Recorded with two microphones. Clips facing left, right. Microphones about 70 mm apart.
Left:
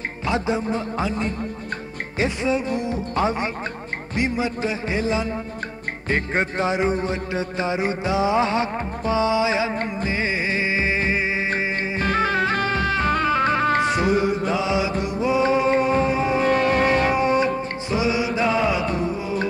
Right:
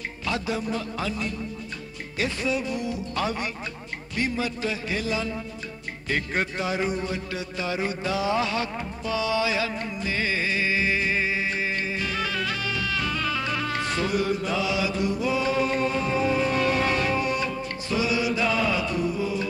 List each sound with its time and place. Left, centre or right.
0.3 s music: left
11.5 s music: left
13.7 s music: left
16.4 s music: left